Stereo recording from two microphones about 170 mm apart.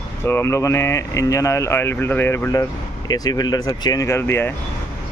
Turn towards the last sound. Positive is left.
turn(degrees=15)  # may be behind; listen again after turning